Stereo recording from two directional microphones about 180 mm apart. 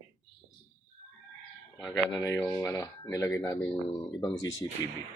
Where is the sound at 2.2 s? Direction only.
15° left (ahead or behind).